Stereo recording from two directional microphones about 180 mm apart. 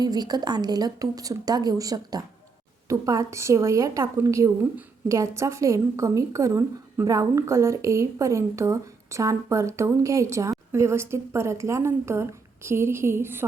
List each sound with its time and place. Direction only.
0.0 s a woman's voice: 20° right (ahead or behind)